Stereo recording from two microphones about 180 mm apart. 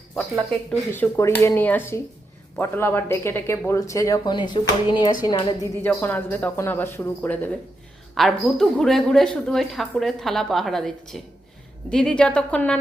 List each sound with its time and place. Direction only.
0.7 s a woman's voice: 15° left (ahead or behind)